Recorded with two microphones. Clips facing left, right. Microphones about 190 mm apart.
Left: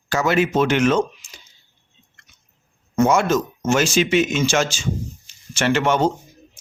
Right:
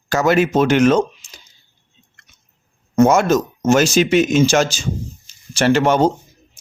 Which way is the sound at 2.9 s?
45° right (ahead or behind).